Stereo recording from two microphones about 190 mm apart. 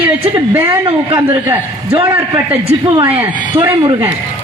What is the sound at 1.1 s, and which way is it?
A woman's voice, 15° right (ahead or behind).